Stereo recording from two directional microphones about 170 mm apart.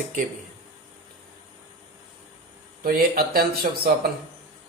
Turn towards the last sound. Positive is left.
turn(degrees=-60)  # may be behind; listen again after turning